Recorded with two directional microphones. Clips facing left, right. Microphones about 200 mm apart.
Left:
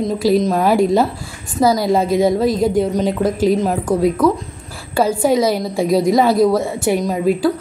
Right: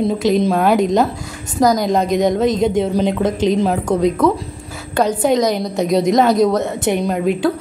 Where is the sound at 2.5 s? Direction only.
20° right (ahead or behind).